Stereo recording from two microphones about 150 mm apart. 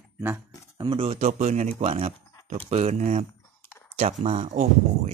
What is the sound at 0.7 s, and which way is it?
Speech, 35° right (ahead or behind).